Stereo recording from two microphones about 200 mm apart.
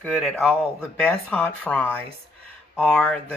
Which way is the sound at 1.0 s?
5° left (ahead or behind).